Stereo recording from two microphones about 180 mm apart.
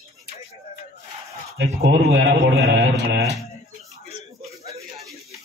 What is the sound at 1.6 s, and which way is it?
A man's voice, 65° right (ahead or behind).